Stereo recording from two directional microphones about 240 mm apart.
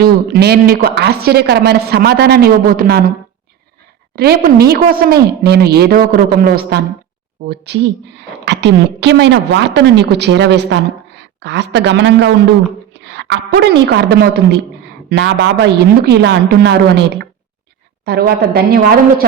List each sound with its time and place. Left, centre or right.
0.0 s a woman's voice: right
4.1 s a woman's voice: right